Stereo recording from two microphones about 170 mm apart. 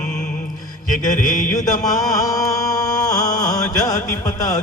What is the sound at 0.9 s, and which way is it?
Mantra, 50° left (ahead or behind).